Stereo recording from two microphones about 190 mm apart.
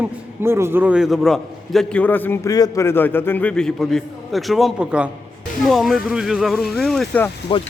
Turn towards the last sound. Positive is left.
turn(degrees=25)  # may be behind; listen again after turning